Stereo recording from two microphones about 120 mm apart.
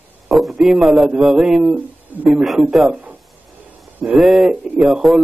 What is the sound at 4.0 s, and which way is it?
Speech, 5° right (ahead or behind).